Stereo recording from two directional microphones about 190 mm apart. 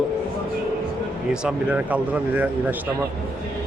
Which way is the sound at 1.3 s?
5° right (ahead or behind).